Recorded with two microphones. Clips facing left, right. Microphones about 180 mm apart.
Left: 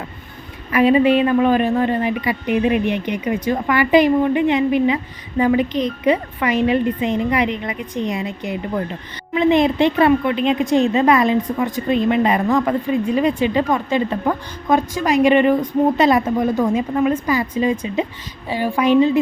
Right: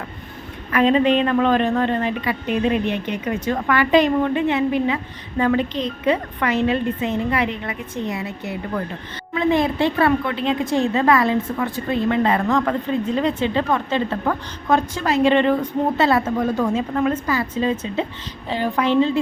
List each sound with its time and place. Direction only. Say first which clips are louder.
0.7 s speech: left 3 dB; 10° left (ahead or behind)